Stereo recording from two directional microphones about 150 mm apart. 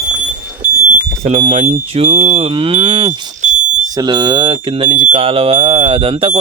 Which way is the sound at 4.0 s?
30° right (ahead or behind).